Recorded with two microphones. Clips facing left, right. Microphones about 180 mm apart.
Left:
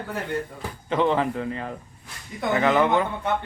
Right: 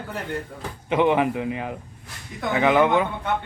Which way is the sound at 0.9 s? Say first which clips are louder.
Right 2 dB; 15° right (ahead or behind).